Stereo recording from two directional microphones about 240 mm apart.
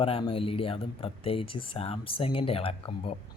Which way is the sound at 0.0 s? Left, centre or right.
Left.